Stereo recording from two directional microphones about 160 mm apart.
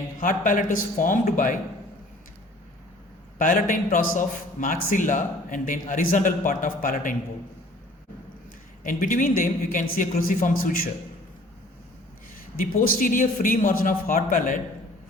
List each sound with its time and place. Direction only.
0.2 s a man's voice: 55° left (ahead or behind)
3.3 s a man's voice: 55° left (ahead or behind)
8.8 s a man's voice: 55° left (ahead or behind)
12.5 s a man's voice: 60° left (ahead or behind)